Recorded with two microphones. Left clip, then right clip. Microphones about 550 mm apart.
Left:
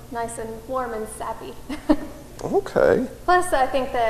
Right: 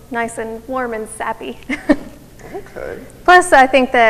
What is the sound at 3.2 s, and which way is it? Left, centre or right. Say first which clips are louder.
Speech: right 12 dB; right.